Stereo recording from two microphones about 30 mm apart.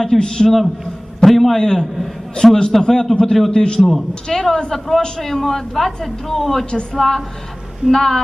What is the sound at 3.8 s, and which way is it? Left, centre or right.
Speech, centre.